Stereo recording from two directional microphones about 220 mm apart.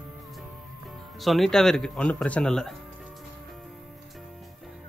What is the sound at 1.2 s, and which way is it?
Speech, centre (ahead or behind).